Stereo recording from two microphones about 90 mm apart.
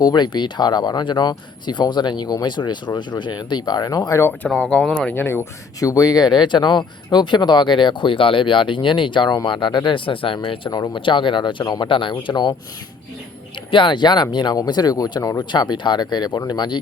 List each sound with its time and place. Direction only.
0.0 s speech: 50° left (ahead or behind)
4.4 s speech: 5° left (ahead or behind)
5.0 s speech: 25° left (ahead or behind)
5.8 s speech: 40° left (ahead or behind); by 10.7 s 70° left (ahead or behind)
10.7 s speech: 50° left (ahead or behind)
11.0 s speech: 65° left (ahead or behind)
11.9 s speech: 70° left (ahead or behind)
13.7 s speech: 65° left (ahead or behind); by 15.4 s 40° left (ahead or behind)
15.4 s speech: 55° left (ahead or behind)